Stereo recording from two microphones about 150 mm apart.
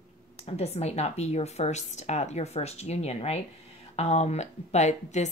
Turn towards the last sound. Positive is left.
turn(degrees=50)  # may be behind; listen again after turning